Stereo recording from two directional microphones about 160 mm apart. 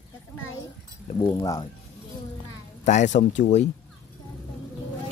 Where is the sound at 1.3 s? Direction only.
25° left (ahead or behind).